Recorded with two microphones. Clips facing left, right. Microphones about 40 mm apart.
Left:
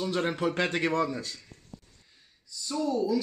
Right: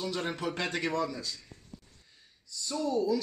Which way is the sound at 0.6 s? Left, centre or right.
Left.